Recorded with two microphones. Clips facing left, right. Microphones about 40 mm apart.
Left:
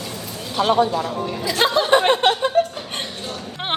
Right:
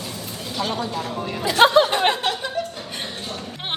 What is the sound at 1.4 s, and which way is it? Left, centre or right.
Speech, right.